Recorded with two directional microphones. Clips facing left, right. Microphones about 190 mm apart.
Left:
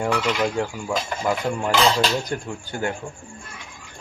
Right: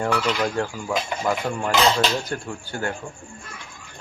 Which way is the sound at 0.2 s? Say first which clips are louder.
Left 1 dB; 15° left (ahead or behind).